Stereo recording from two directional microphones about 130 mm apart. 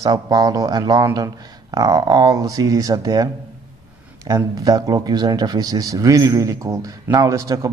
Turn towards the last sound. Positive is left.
turn(degrees=-25)  # may be behind; listen again after turning